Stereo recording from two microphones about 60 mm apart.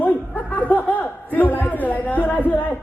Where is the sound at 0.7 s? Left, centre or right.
Left.